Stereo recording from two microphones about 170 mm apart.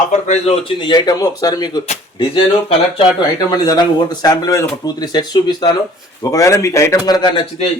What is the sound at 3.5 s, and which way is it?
Speech, 25° left (ahead or behind).